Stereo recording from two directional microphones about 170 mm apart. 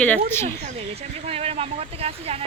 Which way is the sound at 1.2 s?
35° right (ahead or behind).